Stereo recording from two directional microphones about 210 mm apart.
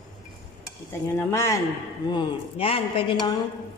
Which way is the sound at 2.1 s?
25° left (ahead or behind).